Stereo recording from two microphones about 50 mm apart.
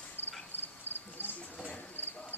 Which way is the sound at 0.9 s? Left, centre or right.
Right.